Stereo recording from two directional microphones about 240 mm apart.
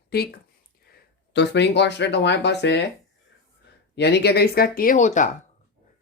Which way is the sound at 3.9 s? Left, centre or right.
Left.